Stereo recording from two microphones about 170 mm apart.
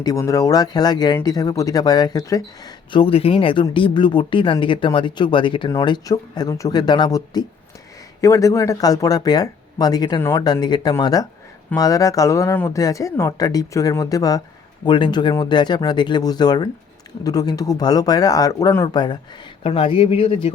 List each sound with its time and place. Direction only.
0.0 s speech: 20° left (ahead or behind)